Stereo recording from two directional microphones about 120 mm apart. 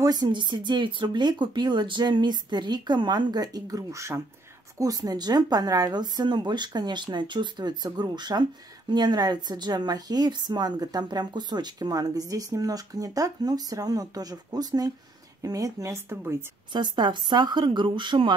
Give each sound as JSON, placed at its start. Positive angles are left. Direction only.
{"t": 0.0, "sound": "a woman's voice", "side_deg": -35}
{"t": 16.7, "sound": "a woman's voice", "side_deg": -40}